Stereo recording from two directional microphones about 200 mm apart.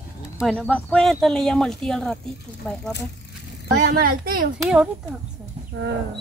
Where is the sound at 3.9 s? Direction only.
45° right (ahead or behind).